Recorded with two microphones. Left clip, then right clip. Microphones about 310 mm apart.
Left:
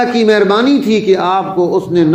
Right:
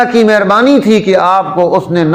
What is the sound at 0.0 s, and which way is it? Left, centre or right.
A man's voice, right.